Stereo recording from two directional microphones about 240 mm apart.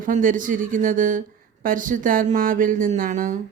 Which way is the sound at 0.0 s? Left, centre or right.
Right.